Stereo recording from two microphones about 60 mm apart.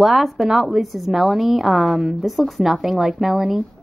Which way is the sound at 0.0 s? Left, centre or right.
Centre.